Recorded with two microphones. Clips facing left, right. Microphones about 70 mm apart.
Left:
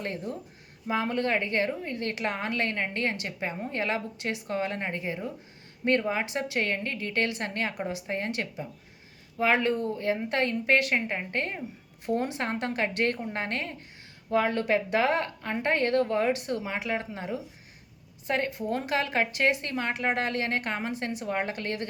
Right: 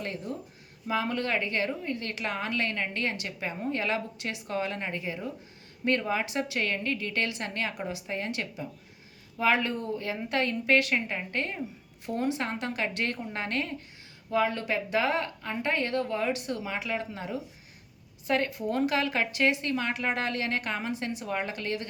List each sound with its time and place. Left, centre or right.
0.0 s a woman's voice: left
14.3 s a woman's voice: left
18.3 s a woman's voice: left